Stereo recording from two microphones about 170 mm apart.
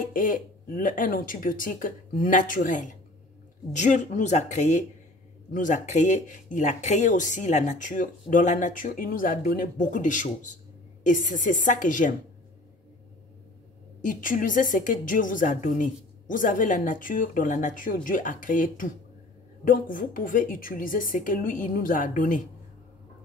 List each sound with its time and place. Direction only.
0.0 s speech: 55° left (ahead or behind)
14.0 s speech: 50° left (ahead or behind)